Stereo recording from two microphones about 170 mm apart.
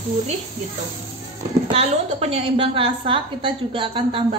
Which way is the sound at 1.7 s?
35° right (ahead or behind).